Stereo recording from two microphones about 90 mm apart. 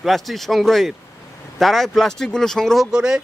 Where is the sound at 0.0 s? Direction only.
Centre (ahead or behind).